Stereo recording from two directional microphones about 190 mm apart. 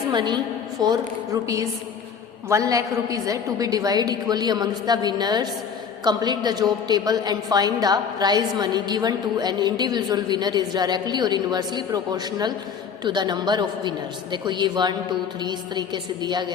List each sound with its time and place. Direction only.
0.1 s a woman's voice: 25° right (ahead or behind)